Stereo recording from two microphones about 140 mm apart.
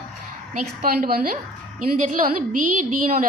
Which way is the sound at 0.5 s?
80° right.